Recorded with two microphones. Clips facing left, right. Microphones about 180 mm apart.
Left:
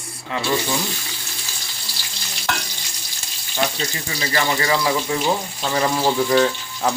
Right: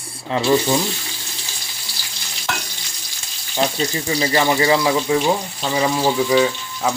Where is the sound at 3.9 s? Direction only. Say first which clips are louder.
Right 6 dB; 30° right (ahead or behind); by 6.9 s 5° right (ahead or behind).